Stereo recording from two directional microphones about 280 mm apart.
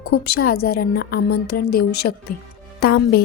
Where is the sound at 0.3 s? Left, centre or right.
Left.